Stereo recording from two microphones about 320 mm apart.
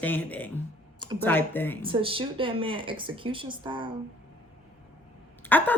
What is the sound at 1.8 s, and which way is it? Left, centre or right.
Speech, centre.